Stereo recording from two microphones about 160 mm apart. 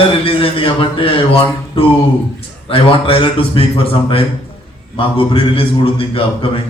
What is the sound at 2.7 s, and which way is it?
A man's voice, 35° left (ahead or behind).